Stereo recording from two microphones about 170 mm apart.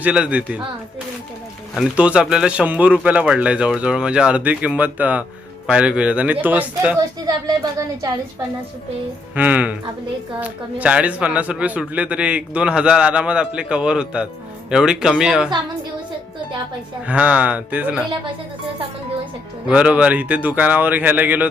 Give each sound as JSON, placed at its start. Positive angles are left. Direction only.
{"t": 0.0, "sound": "speech", "side_deg": -5}
{"t": 1.7, "sound": "speech", "side_deg": -5}
{"t": 7.3, "sound": "a woman's voice", "side_deg": -20}
{"t": 9.3, "sound": "speech", "side_deg": -10}
{"t": 17.1, "sound": "speech", "side_deg": -5}
{"t": 19.6, "sound": "speech", "side_deg": -5}